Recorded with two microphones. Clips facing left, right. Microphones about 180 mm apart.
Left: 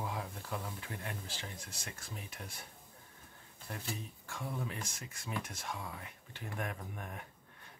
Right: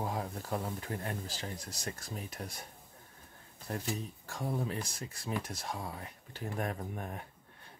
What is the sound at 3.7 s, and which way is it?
Speech, 40° right (ahead or behind).